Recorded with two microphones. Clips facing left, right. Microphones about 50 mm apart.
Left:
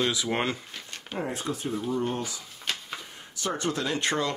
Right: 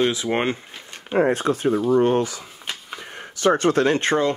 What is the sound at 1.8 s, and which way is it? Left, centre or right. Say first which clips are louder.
Speech: right 12 dB; right.